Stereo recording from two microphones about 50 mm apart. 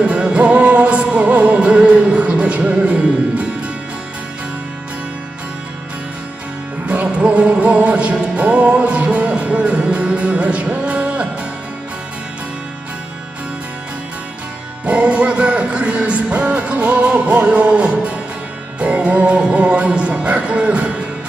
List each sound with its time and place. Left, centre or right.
0.0 s music: right
6.8 s music: right
14.8 s music: right